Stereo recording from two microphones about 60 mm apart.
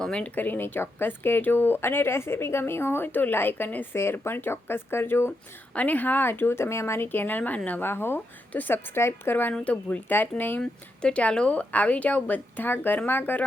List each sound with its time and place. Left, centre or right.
0.0 s speech: centre
0.3 s speech: left
3.9 s speech: left
5.7 s speech: left
7.9 s speech: left
9.0 s a woman's voice: left
9.3 s speech: left
9.6 s a woman's voice: left
10.1 s speech: left
10.6 s a woman's voice: centre